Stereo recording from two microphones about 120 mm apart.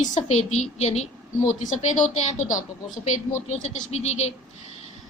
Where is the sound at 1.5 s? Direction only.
80° left; by 4.4 s 65° left (ahead or behind).